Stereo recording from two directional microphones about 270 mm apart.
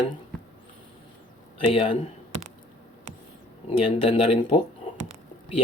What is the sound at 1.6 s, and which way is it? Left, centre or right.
Speech, left.